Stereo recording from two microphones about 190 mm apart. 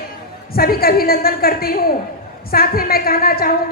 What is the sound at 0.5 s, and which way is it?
A woman's voice, 50° left (ahead or behind).